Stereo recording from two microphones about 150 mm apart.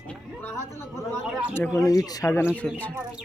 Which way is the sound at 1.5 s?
15° left (ahead or behind).